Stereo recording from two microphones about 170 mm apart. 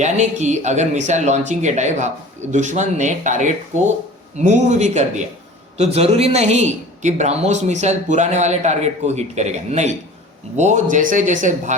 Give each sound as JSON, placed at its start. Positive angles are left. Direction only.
{"t": 0.0, "sound": "speech", "side_deg": -45}